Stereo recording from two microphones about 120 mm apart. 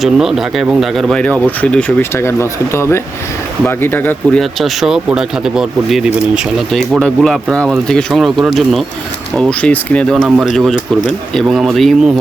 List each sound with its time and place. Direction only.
0.0 s speech: 5° right (ahead or behind)
2.0 s speech: 20° left (ahead or behind)
4.4 s speech: centre (ahead or behind)
10.2 s speech: 5° right (ahead or behind)